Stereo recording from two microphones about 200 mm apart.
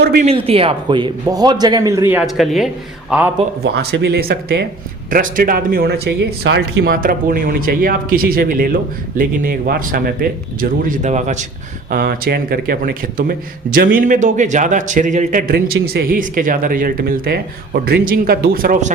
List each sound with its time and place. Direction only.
0.0 s speech: 50° right (ahead or behind)
0.3 s a man's voice: 30° right (ahead or behind); by 2.2 s 10° right (ahead or behind)
2.2 s a man's voice: centre (ahead or behind)
3.8 s speech: 55° right (ahead or behind)